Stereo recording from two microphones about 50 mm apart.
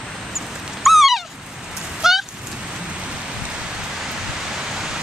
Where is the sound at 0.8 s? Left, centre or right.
Centre.